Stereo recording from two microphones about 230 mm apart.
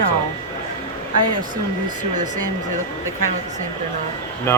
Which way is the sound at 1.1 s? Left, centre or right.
Right.